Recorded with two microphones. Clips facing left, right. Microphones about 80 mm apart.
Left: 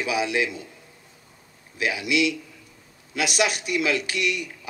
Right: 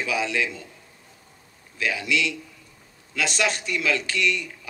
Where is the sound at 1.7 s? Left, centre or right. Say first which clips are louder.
Left 2 dB; centre.